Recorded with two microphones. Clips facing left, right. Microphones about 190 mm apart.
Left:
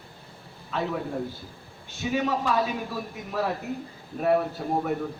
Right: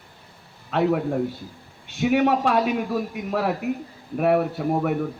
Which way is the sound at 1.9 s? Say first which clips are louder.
Right 7 dB; 70° right (ahead or behind).